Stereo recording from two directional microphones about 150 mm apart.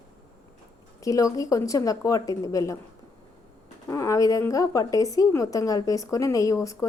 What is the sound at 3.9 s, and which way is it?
A woman's voice, 20° left (ahead or behind).